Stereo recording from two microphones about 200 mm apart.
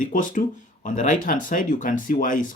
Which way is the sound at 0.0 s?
40° left (ahead or behind).